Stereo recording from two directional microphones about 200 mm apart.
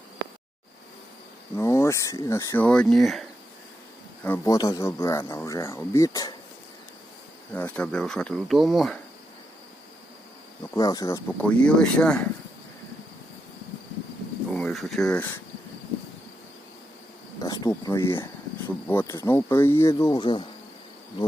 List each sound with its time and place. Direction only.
1.5 s speech: 15° left (ahead or behind)
4.2 s speech: 15° left (ahead or behind)
7.5 s speech: 5° left (ahead or behind)
10.8 s speech: 20° left (ahead or behind)
14.5 s a sound: centre (ahead or behind)
17.4 s speech: 20° left (ahead or behind)